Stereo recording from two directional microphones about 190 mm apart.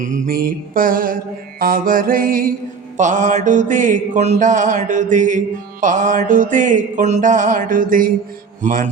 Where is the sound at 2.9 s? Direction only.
40° right (ahead or behind).